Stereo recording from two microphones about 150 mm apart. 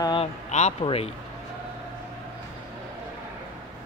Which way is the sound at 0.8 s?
40° left (ahead or behind).